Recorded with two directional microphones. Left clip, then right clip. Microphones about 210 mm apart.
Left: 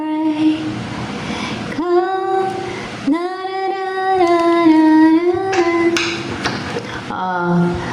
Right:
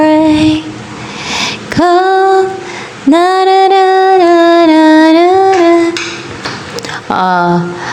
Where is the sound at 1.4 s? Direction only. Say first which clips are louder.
Right 14 dB; 30° right (ahead or behind).